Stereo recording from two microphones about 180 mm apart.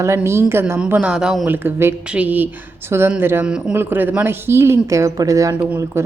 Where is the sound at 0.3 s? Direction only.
15° right (ahead or behind).